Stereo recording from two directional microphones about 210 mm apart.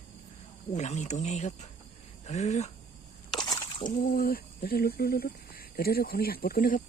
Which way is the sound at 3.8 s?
40° left (ahead or behind).